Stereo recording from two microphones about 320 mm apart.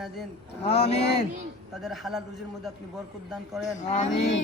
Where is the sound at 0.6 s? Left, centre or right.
Centre.